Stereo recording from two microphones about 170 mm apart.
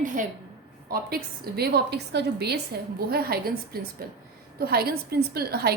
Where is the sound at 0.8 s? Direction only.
60° right (ahead or behind).